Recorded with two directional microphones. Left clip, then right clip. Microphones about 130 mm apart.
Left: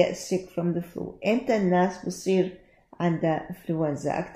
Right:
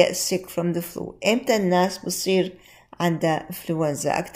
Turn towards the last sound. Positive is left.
turn(degrees=-20)  # may be behind; listen again after turning